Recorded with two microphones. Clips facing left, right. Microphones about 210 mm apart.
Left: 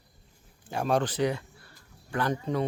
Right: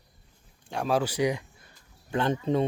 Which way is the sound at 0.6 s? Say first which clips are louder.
Even; centre (ahead or behind).